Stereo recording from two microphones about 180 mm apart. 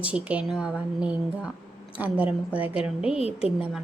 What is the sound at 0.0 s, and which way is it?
A woman's voice, 5° right (ahead or behind).